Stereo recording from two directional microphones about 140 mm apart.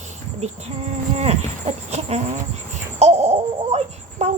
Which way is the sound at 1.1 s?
50° right (ahead or behind).